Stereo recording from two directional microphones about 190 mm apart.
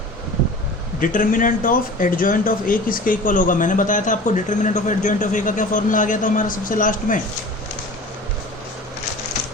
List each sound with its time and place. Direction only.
0.9 s speech: 45° left (ahead or behind)